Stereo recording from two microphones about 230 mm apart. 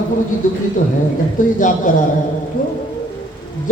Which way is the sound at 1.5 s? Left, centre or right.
Left.